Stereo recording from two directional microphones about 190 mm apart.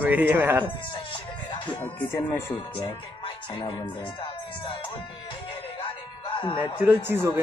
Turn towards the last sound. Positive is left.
turn(degrees=-10)  # may be behind; listen again after turning